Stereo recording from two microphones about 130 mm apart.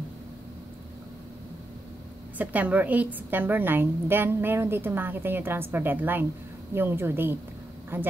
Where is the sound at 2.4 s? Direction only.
10° right (ahead or behind).